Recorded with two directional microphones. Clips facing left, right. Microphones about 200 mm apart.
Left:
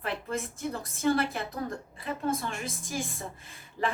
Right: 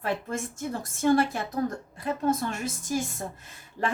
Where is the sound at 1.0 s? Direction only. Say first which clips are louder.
Right 4 dB; 45° right (ahead or behind).